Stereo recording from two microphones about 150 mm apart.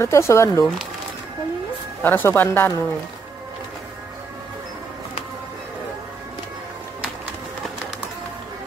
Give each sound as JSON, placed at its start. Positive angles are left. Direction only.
{"t": 0.0, "sound": "speech", "side_deg": 20}
{"t": 2.0, "sound": "speech", "side_deg": 15}